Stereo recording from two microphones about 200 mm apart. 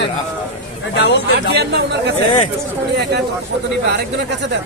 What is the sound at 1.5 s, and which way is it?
Speech, 55° right (ahead or behind).